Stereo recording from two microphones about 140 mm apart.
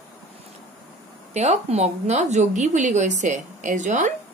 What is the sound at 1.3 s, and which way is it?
A woman's voice, 50° right (ahead or behind).